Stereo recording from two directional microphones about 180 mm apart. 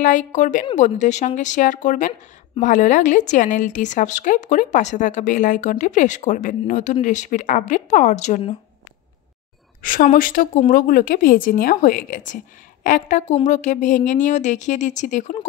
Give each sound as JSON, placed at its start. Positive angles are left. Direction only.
{"t": 0.0, "sound": "a woman's voice", "side_deg": 45}
{"t": 9.8, "sound": "a woman's voice", "side_deg": 50}